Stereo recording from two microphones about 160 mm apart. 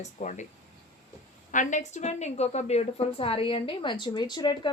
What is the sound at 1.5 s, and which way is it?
A woman's voice, 50° left (ahead or behind).